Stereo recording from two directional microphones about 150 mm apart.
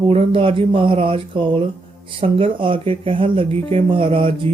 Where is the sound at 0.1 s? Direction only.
40° right (ahead or behind).